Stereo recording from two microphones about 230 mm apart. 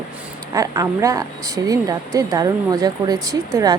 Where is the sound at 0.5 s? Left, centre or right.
Centre.